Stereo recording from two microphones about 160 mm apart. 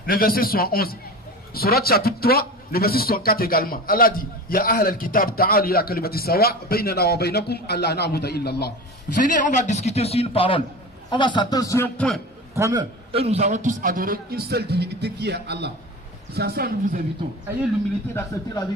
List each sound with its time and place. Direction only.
0.0 s a man's voice: 65° left (ahead or behind); by 8.7 s 90° left
9.1 s a man's voice: 50° left (ahead or behind); by 11.9 s 20° left (ahead or behind)
11.9 s a man's voice: centre (ahead or behind)
12.5 s a man's voice: 20° right (ahead or behind)
13.1 s a man's voice: 40° right (ahead or behind); by 17.0 s 70° right (ahead or behind)
18.1 s a man's voice: 25° left (ahead or behind)